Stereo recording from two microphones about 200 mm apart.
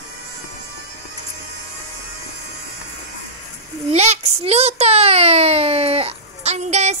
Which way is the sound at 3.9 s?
35° right (ahead or behind).